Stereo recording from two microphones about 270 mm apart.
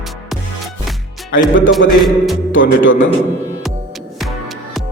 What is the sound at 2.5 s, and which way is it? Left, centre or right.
Speech, left.